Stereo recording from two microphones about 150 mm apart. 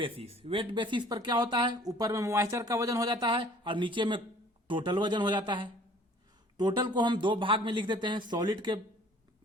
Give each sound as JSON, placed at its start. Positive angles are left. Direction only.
{"t": 0.4, "sound": "speech", "side_deg": -35}